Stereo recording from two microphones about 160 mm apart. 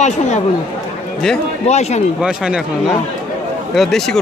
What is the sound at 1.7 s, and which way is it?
Speech, 45° left (ahead or behind).